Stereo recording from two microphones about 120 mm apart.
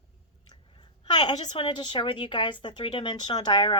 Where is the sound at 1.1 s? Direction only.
40° left (ahead or behind).